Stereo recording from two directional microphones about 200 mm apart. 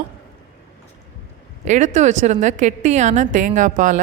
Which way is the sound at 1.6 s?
40° right (ahead or behind).